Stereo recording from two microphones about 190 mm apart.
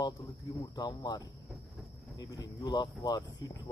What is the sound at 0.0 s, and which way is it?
Speech, 20° left (ahead or behind).